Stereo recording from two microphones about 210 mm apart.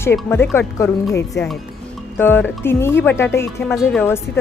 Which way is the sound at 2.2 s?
10° left (ahead or behind).